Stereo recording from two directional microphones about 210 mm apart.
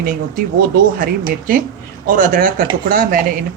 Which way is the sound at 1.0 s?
40° right (ahead or behind).